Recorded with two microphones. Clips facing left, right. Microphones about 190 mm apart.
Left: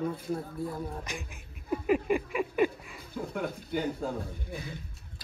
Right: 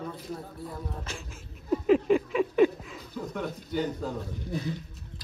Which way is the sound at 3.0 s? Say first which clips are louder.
Even; 50° left (ahead or behind).